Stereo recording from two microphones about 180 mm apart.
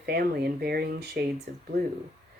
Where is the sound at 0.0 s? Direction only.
60° right (ahead or behind).